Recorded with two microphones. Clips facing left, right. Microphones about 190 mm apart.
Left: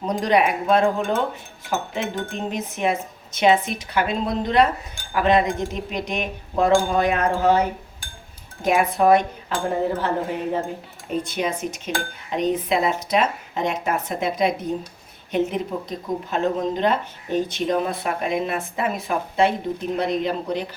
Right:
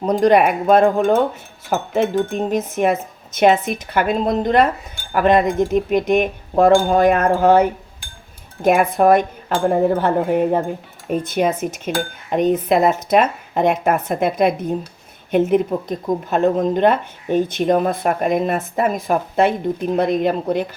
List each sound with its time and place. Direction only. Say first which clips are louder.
0.0 s speech: right 6 dB; 50° right (ahead or behind)
9.9 s cutlery: right 7 dB; 55° right (ahead or behind)
11.1 s speech: right 6 dB; 50° right (ahead or behind)